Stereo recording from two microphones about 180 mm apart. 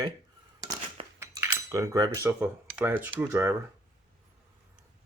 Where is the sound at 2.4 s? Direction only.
10° right (ahead or behind).